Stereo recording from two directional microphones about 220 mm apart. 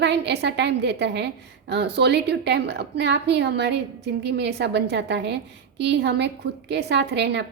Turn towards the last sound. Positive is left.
turn(degrees=-50)  # may be behind; listen again after turning